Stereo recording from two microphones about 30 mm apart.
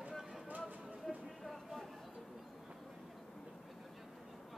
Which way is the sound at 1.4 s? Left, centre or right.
Centre.